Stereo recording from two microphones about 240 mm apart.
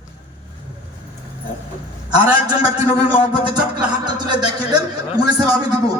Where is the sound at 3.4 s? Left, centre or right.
Centre.